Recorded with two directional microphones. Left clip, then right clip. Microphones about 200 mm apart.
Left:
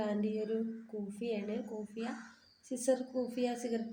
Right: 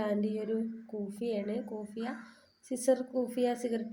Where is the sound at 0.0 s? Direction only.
15° right (ahead or behind).